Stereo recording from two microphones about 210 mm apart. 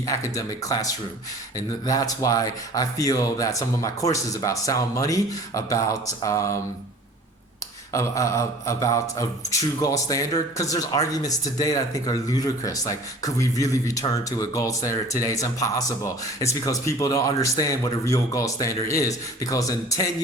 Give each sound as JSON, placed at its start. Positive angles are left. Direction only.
{"t": 0.0, "sound": "speech", "side_deg": 15}
{"t": 7.9, "sound": "speech", "side_deg": 15}